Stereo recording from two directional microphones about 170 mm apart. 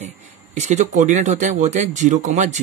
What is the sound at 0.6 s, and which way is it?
Speech, 45° right (ahead or behind).